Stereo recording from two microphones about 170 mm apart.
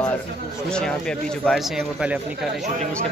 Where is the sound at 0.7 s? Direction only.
5° left (ahead or behind).